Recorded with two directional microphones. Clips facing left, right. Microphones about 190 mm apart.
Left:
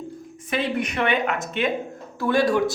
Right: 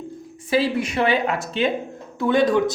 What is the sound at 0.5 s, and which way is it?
A woman's voice, 30° right (ahead or behind).